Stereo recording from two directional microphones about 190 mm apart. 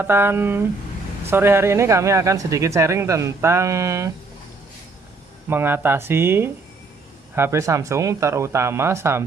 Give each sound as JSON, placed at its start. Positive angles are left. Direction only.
{"t": 0.0, "sound": "speech", "side_deg": -10}
{"t": 5.5, "sound": "speech", "side_deg": -10}